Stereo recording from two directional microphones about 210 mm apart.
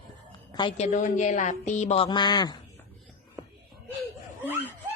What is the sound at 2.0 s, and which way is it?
Speech, 20° left (ahead or behind).